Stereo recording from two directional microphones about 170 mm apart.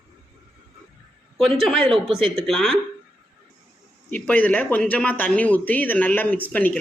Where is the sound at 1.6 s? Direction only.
Centre (ahead or behind).